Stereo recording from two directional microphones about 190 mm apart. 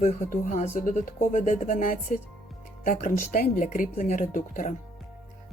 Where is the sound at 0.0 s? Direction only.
40° left (ahead or behind).